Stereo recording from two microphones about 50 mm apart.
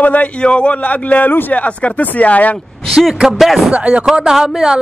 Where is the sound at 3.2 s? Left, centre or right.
Centre.